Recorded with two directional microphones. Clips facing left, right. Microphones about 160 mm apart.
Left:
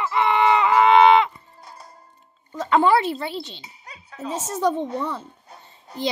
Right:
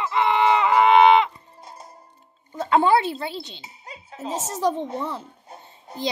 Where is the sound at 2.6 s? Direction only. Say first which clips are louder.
Even; 25° right (ahead or behind).